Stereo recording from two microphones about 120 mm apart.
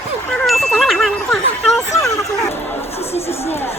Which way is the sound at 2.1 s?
25° left (ahead or behind).